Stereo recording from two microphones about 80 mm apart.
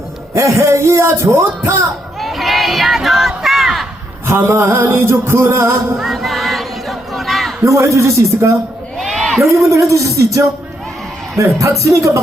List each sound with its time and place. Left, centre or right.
0.3 s a man's voice: right
2.2 s a sound: centre
4.3 s a man's voice: right
6.0 s battle cry: centre
7.6 s a man's voice: right
9.0 s a sound: centre
9.6 s a man's voice: right